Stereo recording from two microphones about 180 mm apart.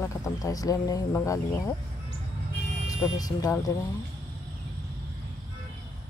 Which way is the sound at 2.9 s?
20° left (ahead or behind).